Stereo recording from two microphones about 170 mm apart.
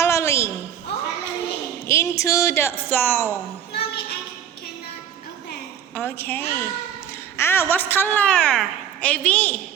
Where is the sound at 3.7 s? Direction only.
70° left (ahead or behind).